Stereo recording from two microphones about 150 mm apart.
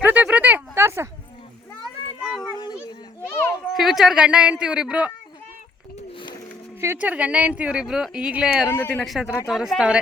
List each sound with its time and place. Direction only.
0.0 s a sound: 10° right (ahead or behind)
2.2 s cat: centre (ahead or behind)
3.7 s speech: centre (ahead or behind)
6.0 s a sound: 35° left (ahead or behind)
6.8 s a woman's voice: 10° right (ahead or behind)
8.6 s a woman's voice: 15° left (ahead or behind)
9.0 s speech: 5° right (ahead or behind)